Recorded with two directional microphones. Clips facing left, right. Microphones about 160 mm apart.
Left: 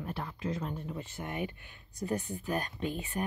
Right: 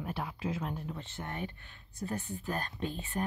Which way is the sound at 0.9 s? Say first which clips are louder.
Left 3 dB; 10° left (ahead or behind).